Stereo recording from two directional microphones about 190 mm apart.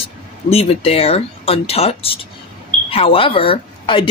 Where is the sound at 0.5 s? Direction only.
30° left (ahead or behind).